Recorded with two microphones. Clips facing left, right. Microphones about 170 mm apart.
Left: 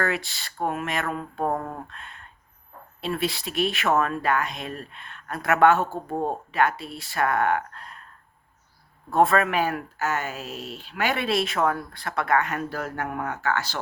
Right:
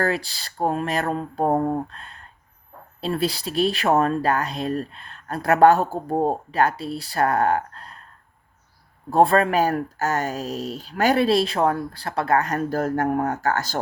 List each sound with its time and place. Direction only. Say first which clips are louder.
0.0 s speech: right 3 dB; 35° right (ahead or behind)
9.0 s speech: right 3 dB; 35° right (ahead or behind)